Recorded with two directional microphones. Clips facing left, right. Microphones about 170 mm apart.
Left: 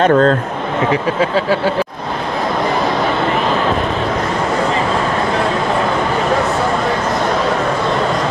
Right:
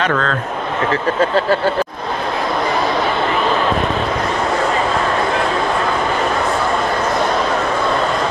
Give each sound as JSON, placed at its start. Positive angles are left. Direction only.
{"t": 0.0, "sound": "a man's voice", "side_deg": 35}
{"t": 1.2, "sound": "vehicle", "side_deg": 5}